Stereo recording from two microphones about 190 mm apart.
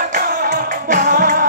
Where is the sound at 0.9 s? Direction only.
45° right (ahead or behind).